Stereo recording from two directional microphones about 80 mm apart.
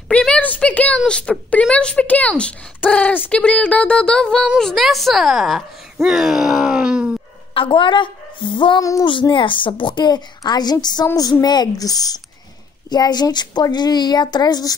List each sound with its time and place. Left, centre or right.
0.4 s a woman's voice: centre
6.0 s groan: centre
7.6 s a woman's voice: left